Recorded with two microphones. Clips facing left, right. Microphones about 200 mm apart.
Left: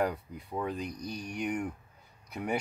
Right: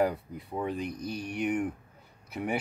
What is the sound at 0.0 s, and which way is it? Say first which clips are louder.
Speech: right 3 dB; 5° right (ahead or behind).